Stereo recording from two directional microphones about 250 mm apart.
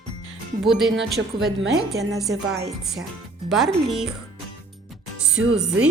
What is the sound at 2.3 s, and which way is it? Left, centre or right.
Speech, right.